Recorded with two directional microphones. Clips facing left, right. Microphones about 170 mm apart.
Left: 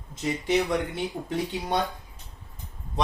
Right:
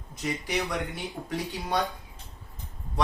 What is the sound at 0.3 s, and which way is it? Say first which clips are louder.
Speech: left 6 dB; 25° left (ahead or behind).